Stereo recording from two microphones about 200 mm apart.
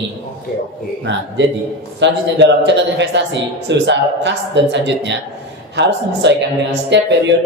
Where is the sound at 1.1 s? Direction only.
60° right (ahead or behind).